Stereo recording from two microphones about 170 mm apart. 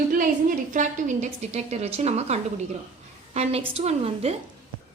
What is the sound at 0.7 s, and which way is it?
A woman's voice, 45° right (ahead or behind).